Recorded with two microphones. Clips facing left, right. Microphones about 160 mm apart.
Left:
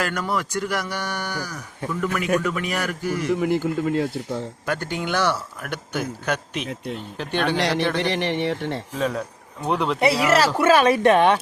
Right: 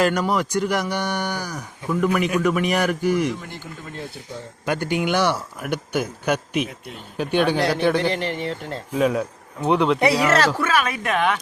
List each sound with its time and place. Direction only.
0.0 s speech: 20° right (ahead or behind)
3.3 s speech: 75° left (ahead or behind)
4.6 s speech: 15° right (ahead or behind)
7.5 s a man's voice: 85° left
7.8 s speech: 10° right (ahead or behind)
8.1 s speech: 75° left (ahead or behind)
8.9 s speech: 10° right (ahead or behind); by 10.5 s 5° left (ahead or behind)
10.6 s speech: 30° left (ahead or behind)